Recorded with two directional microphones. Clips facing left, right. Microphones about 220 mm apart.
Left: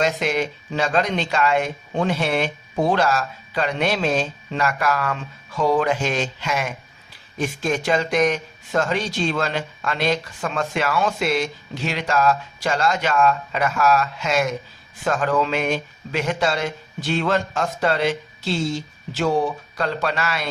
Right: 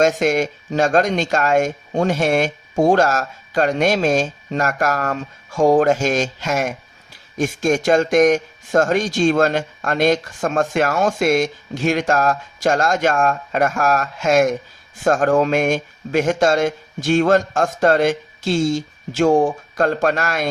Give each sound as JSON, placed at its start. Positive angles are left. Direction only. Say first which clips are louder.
{"t": 0.0, "sound": "speech", "louder": "right 5 dB", "side_deg": -45}